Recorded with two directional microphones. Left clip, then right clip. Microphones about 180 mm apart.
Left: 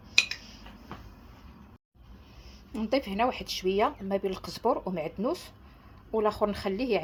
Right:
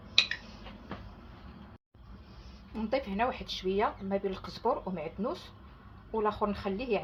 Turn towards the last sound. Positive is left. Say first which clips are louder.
# left 4 dB
turn(degrees=50)  # may be behind; listen again after turning